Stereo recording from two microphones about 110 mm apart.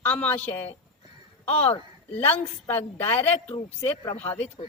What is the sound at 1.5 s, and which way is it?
Speech, 65° left (ahead or behind).